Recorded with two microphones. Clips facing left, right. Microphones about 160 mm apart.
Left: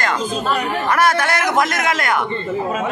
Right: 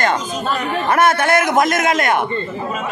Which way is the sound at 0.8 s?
25° right (ahead or behind).